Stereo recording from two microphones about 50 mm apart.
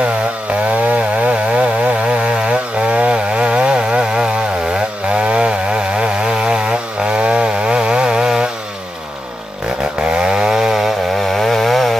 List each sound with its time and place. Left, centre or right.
0.7 s chainsaw: right
10.0 s chainsaw: centre